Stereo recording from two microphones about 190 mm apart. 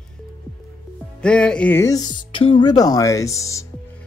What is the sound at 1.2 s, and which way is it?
Speech, 5° left (ahead or behind).